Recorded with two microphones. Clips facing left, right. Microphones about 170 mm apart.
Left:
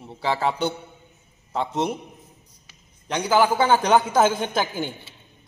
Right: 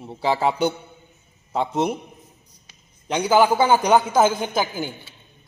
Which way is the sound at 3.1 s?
15° right (ahead or behind).